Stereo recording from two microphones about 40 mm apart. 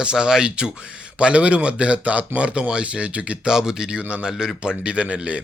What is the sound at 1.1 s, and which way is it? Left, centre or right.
Speech, right.